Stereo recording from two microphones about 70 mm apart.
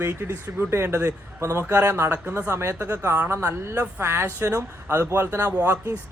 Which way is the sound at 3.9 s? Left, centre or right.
Right.